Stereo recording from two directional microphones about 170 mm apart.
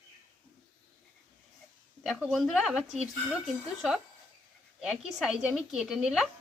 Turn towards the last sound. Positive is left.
turn(degrees=-5)  # may be behind; listen again after turning